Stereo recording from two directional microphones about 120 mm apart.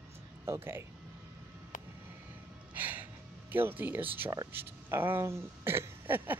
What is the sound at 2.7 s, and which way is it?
Speech, 15° right (ahead or behind).